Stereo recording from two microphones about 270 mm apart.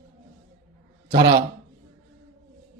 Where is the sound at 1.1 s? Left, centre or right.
Centre.